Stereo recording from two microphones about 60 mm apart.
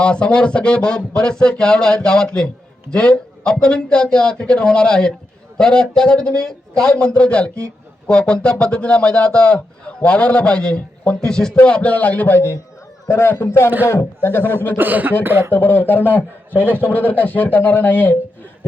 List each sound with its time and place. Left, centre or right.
0.0 s a man's voice: centre
13.1 s a man's voice: left
14.8 s speech: right
15.5 s a man's voice: left